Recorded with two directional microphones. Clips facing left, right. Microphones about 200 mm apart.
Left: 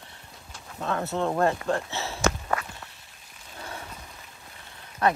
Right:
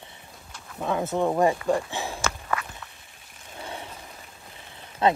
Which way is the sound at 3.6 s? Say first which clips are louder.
Right 2 dB; 25° right (ahead or behind).